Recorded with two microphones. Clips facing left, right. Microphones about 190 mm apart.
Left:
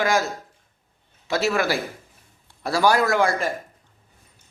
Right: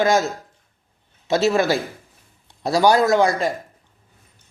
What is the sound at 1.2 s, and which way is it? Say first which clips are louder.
A man's voice: right 4 dB; 25° right (ahead or behind).